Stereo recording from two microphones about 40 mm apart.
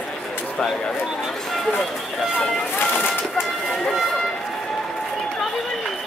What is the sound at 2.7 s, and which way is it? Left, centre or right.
Bird, left.